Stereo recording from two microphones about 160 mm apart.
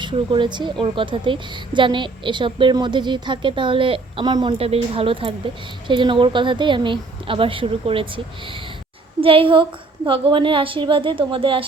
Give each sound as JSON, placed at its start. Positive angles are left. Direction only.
{"t": 0.0, "sound": "a woman's voice", "side_deg": -30}